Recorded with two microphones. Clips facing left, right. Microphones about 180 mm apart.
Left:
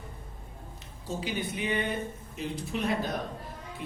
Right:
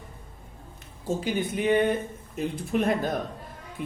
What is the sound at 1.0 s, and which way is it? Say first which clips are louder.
Speech: right 6 dB; 50° right (ahead or behind).